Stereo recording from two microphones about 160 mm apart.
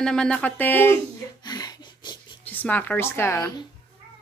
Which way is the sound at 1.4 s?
25° left (ahead or behind).